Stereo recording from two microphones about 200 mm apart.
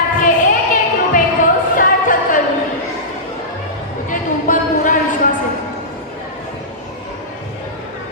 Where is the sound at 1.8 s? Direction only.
40° left (ahead or behind).